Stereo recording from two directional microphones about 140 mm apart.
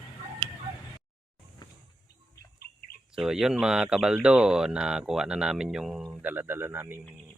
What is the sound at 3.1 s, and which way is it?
Speech, 5° right (ahead or behind).